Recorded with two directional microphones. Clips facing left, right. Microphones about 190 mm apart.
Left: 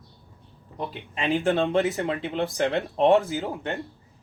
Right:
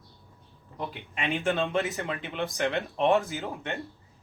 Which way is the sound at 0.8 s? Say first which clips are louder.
Left 3 dB; 30° left (ahead or behind).